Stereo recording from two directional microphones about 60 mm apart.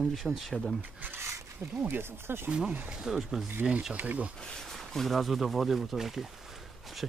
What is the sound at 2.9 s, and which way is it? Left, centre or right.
Speech, centre.